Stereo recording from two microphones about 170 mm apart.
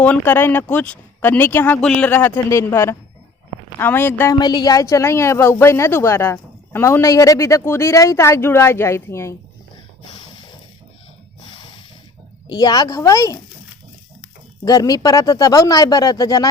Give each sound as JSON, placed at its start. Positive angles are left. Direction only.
{"t": 0.0, "sound": "speech", "side_deg": 10}
{"t": 4.4, "sound": "speech", "side_deg": 25}
{"t": 10.0, "sound": "a sound", "side_deg": 30}
{"t": 12.5, "sound": "speech", "side_deg": 20}
{"t": 14.6, "sound": "speech", "side_deg": 20}